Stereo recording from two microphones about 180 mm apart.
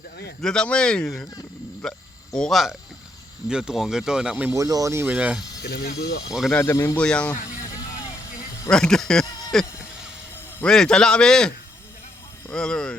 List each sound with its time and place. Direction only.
0.4 s speech: 5° left (ahead or behind)
5.6 s speech: 60° left (ahead or behind)
6.2 s speech: centre (ahead or behind)
6.6 s speech: 15° left (ahead or behind)
8.7 s speech: 5° left (ahead or behind)